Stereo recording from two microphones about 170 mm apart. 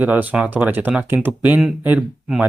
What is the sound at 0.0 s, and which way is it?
Speech, 10° right (ahead or behind).